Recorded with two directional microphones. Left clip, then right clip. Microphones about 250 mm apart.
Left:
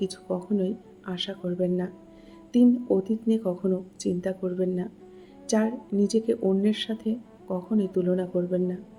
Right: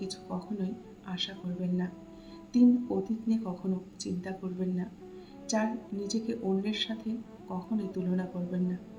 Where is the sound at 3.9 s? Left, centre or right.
Left.